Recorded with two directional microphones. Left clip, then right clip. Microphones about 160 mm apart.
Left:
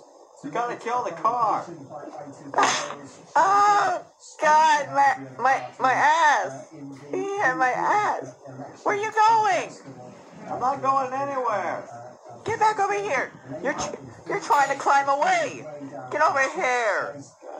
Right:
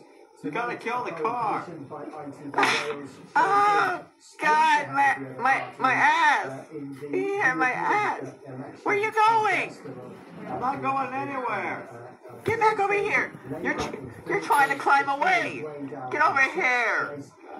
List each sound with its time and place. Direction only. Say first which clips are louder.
0.5 s speech: left 2 dB; 20° right (ahead or behind)